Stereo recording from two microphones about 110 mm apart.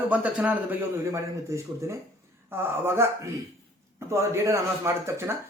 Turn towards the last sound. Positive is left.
turn(degrees=-25)  # may be behind; listen again after turning